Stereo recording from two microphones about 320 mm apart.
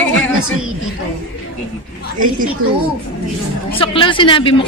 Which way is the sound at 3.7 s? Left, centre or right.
Centre.